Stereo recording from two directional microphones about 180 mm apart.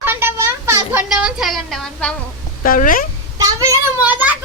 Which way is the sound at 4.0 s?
10° right (ahead or behind).